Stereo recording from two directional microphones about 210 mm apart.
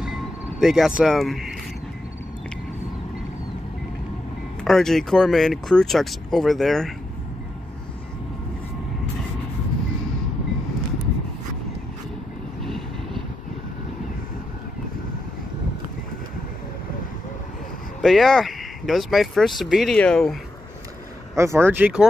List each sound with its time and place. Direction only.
0.0 s music: 5° right (ahead or behind)
4.6 s speech: centre (ahead or behind)
12.6 s vehicle: centre (ahead or behind)
18.0 s speech: centre (ahead or behind)
21.4 s speech: 10° right (ahead or behind)